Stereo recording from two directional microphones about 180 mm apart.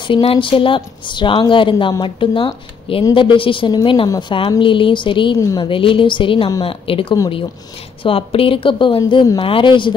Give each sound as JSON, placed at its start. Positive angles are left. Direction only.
{"t": 0.0, "sound": "a woman's voice", "side_deg": 30}